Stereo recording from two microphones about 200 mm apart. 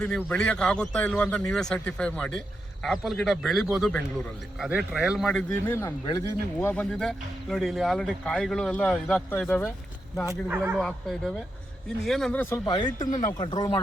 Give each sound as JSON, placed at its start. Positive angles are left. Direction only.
{"t": 0.0, "sound": "speech", "side_deg": 5}
{"t": 10.2, "sound": "speech", "side_deg": -10}
{"t": 12.0, "sound": "speech", "side_deg": 0}
{"t": 12.6, "sound": "speech", "side_deg": 20}
{"t": 13.0, "sound": "speech", "side_deg": 40}
{"t": 13.2, "sound": "speech", "side_deg": 20}